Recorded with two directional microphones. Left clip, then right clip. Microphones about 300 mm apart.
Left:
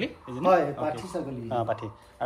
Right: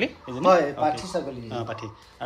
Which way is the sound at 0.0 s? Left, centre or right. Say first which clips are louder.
Right 5 dB; centre.